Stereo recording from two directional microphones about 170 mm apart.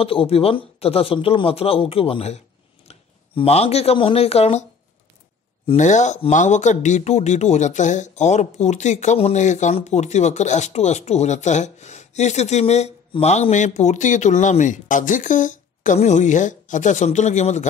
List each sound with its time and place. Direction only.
0.0 s speech: 35° left (ahead or behind)
5.8 s speech: 45° left (ahead or behind)